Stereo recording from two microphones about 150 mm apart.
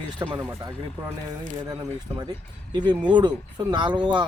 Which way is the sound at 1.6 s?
25° right (ahead or behind).